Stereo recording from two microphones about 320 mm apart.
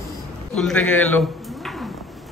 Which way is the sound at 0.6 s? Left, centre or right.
Centre.